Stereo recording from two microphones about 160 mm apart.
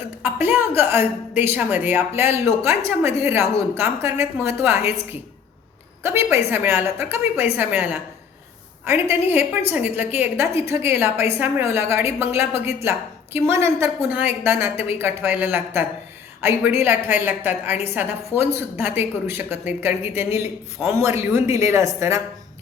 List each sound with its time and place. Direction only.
0.2 s a woman's voice: 15° right (ahead or behind)
6.0 s a woman's voice: 15° right (ahead or behind)